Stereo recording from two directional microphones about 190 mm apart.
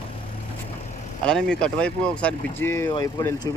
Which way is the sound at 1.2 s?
5° left (ahead or behind).